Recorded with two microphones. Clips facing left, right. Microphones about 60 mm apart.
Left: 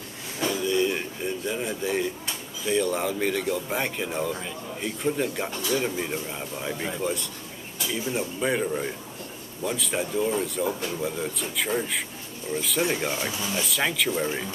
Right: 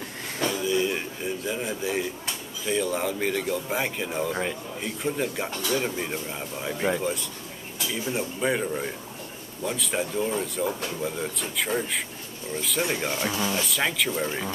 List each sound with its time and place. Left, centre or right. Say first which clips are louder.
0.5 s a sound: left 1 dB; centre
2.6 s speech: left 1 dB; centre
13.3 s speech: right 4 dB; right
13.6 s speech: even; centre